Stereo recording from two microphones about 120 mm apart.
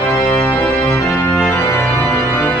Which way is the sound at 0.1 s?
15° left (ahead or behind).